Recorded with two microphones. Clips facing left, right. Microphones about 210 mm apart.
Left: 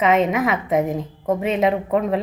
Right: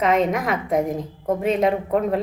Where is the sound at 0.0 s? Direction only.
5° left (ahead or behind).